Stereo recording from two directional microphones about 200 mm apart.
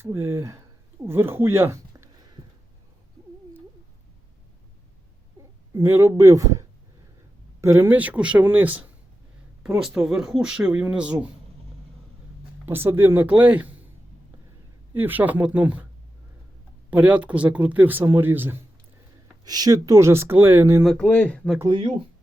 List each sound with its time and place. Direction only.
0.0 s speech: 10° right (ahead or behind)
5.4 s a sound: 10° right (ahead or behind)
7.6 s speech: 15° right (ahead or behind)
12.6 s speech: 10° right (ahead or behind)
14.9 s speech: 10° right (ahead or behind)
16.9 s speech: 5° right (ahead or behind)
20.8 s speech: 5° left (ahead or behind)
21.6 s speech: 25° right (ahead or behind)